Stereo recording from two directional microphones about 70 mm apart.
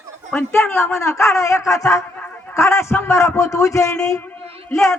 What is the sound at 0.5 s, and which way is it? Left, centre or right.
A man's voice, left.